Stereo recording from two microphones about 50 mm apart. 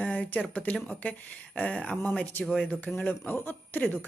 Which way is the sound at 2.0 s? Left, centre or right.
Left.